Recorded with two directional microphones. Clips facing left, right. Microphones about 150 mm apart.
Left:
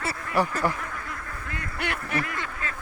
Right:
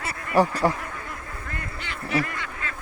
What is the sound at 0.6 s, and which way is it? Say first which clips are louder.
Speech: right 4 dB; 35° right (ahead or behind).